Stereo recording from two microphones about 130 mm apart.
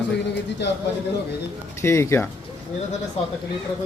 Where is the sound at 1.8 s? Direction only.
20° left (ahead or behind).